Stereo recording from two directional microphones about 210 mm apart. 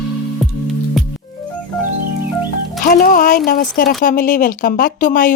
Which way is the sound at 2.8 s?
40° left (ahead or behind).